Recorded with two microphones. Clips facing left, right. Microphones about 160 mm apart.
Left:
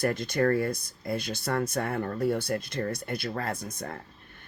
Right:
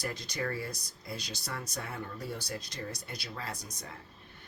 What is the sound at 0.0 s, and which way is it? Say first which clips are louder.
Speech: left 11 dB; 55° left (ahead or behind).